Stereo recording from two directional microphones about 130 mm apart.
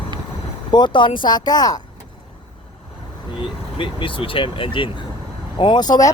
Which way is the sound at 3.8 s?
40° left (ahead or behind).